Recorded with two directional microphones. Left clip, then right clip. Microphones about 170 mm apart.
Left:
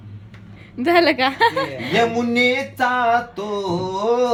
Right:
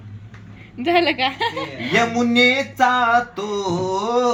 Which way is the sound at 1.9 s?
5° left (ahead or behind).